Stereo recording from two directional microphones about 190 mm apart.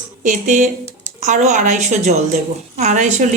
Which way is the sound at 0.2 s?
40° right (ahead or behind).